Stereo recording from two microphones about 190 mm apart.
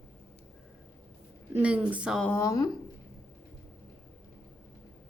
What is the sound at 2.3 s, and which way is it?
Speech, 15° left (ahead or behind).